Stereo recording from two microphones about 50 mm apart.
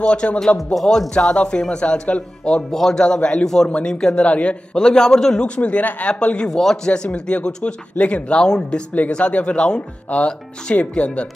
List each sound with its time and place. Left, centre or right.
0.0 s speech: left
0.7 s a man's voice: centre
1.1 s speech: left
2.5 s a man's voice: centre; by 4.6 s left
4.7 s a man's voice: centre
5.6 s speech: left
6.5 s a man's voice: centre
6.9 s speech: centre